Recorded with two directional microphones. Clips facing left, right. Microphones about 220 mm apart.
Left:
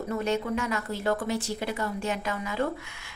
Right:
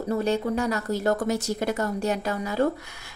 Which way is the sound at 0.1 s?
35° right (ahead or behind).